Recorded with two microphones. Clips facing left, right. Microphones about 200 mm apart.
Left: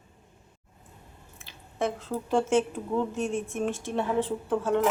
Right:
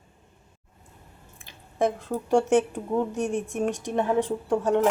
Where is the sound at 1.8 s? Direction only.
15° right (ahead or behind).